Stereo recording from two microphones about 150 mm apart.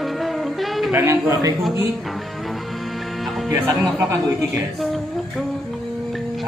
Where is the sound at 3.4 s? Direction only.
20° right (ahead or behind).